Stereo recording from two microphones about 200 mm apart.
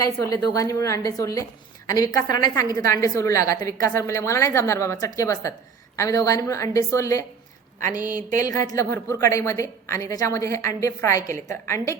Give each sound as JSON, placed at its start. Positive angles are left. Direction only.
{"t": 0.0, "sound": "a woman's voice", "side_deg": 15}
{"t": 8.1, "sound": "a sound", "side_deg": -40}
{"t": 8.6, "sound": "a woman's voice", "side_deg": 15}